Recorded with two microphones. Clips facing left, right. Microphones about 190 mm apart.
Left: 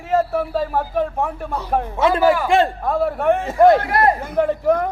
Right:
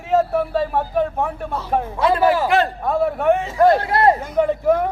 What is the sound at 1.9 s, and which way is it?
Speech, 25° left (ahead or behind).